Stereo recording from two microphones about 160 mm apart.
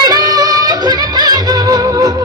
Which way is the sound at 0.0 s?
25° right (ahead or behind).